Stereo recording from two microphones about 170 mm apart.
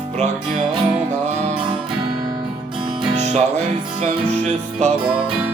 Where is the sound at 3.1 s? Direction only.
40° right (ahead or behind).